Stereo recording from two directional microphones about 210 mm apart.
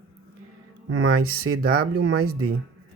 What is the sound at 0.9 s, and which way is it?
Speech, 60° right (ahead or behind).